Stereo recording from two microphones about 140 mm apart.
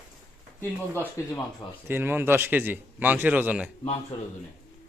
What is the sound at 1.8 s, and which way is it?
A man's voice, 15° right (ahead or behind).